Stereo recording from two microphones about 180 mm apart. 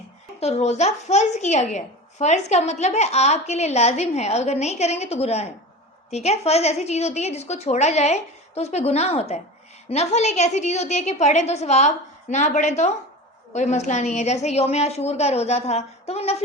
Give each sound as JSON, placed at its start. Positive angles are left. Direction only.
{"t": 0.3, "sound": "speech", "side_deg": 35}